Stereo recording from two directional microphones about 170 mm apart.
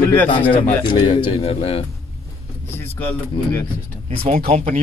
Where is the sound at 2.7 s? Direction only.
10° left (ahead or behind).